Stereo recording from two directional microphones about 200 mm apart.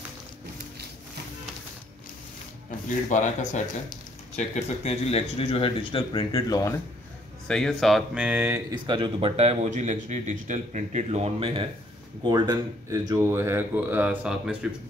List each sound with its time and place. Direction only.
3.1 s speech: 40° left (ahead or behind); by 6.8 s 15° left (ahead or behind)
7.4 s speech: centre (ahead or behind)
8.6 s speech: 20° right (ahead or behind); by 14.7 s 5° right (ahead or behind)